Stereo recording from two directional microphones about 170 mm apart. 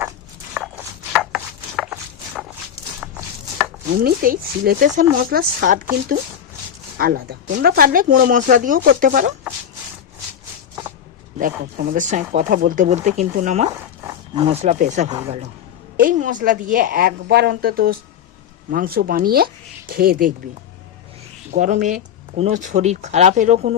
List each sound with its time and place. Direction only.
0.5 s chopping: 5° right (ahead or behind)
4.0 s speech: 60° right (ahead or behind)
7.0 s speech: 60° right (ahead or behind)
11.3 s speech: 55° right (ahead or behind)
13.7 s dog: 15° right (ahead or behind)
14.3 s speech: 35° right (ahead or behind)
16.0 s speech: 50° right (ahead or behind)
21.5 s speech: 50° right (ahead or behind)